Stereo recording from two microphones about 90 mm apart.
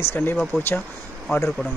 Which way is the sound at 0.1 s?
25° left (ahead or behind).